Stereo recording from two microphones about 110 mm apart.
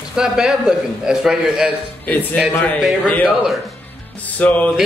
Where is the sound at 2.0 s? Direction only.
15° left (ahead or behind).